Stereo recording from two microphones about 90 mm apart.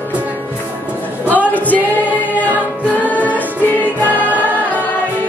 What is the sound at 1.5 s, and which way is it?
Choir, 20° left (ahead or behind).